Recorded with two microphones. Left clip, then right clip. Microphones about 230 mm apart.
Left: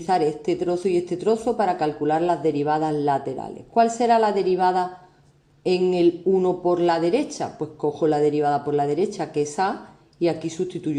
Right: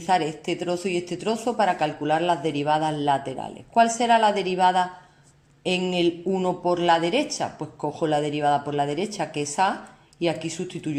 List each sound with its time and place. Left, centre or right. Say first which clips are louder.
0.0 s a woman's voice: left 2 dB; right